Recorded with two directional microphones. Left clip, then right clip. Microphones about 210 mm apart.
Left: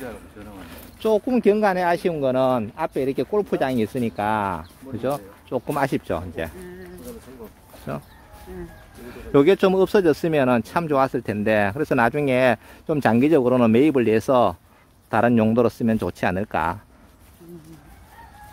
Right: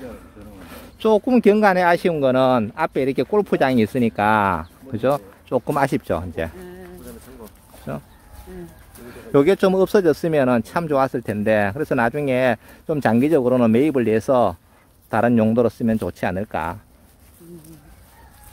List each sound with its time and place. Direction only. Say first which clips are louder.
0.7 s speech: right 3 dB; 35° right (ahead or behind)
7.9 s speech: even; 5° right (ahead or behind)
9.1 s speech: even; 10° right (ahead or behind)